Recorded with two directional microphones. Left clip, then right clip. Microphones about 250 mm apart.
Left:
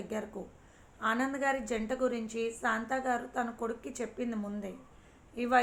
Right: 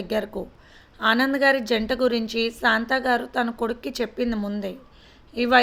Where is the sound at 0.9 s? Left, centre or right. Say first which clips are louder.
Right 11 dB; right.